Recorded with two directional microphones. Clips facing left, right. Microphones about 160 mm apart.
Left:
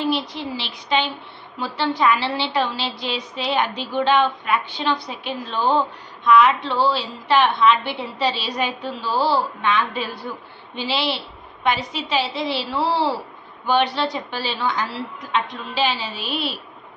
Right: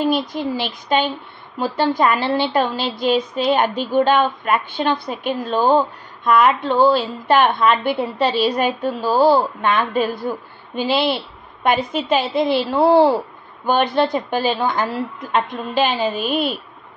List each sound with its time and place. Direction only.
0.0 s a woman's voice: 45° right (ahead or behind)